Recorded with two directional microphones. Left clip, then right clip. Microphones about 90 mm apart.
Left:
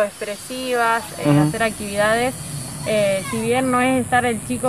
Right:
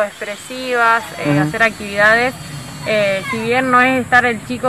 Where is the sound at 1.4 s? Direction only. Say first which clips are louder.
Right 5 dB; 10° left (ahead or behind).